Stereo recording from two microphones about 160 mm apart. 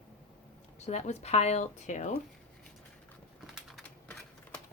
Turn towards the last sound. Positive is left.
turn(degrees=5)  # may be behind; listen again after turning